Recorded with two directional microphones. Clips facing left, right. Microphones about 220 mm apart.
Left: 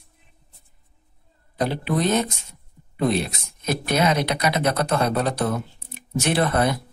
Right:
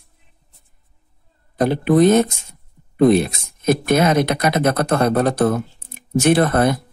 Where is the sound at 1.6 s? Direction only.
50° right (ahead or behind).